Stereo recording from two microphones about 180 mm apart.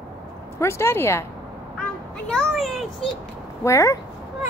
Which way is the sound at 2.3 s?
Centre (ahead or behind).